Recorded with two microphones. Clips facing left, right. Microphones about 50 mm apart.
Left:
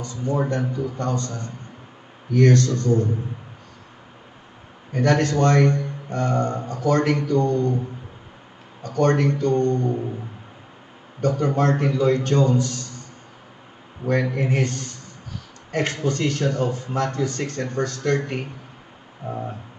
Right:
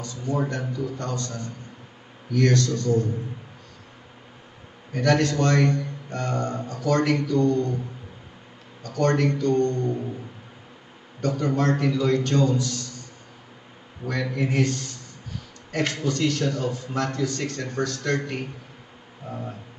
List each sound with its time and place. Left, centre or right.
0.0 s a man's voice: left
4.9 s a man's voice: left
8.8 s a man's voice: left
11.1 s a man's voice: left
14.0 s a man's voice: left
19.2 s a sound: left